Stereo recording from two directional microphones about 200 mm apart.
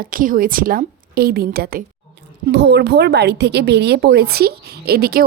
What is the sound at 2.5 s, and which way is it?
A woman's voice, 60° right (ahead or behind).